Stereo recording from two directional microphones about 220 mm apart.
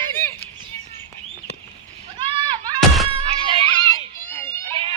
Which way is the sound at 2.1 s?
20° right (ahead or behind).